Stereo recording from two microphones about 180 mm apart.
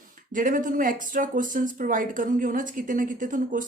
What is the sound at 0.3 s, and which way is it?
A woman's voice, 45° right (ahead or behind).